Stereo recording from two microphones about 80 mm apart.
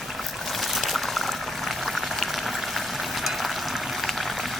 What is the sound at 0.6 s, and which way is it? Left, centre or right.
Boiling, centre.